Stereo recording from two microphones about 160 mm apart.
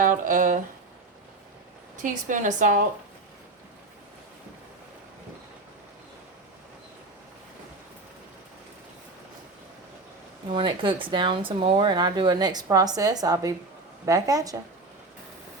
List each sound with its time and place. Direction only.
0.0 s speech: 55° right (ahead or behind)
2.0 s a woman's voice: 55° right (ahead or behind)
10.5 s speech: 30° right (ahead or behind)